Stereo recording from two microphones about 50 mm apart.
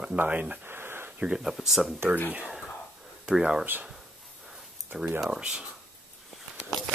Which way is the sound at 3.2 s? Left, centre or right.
Centre.